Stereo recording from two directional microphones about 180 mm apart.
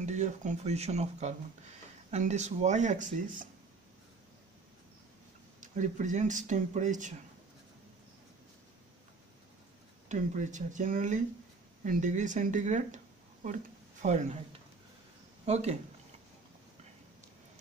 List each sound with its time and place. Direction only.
0.0 s speech: 40° right (ahead or behind)
5.6 s speech: 45° right (ahead or behind)
10.0 s speech: 40° right (ahead or behind)
15.4 s speech: 35° right (ahead or behind)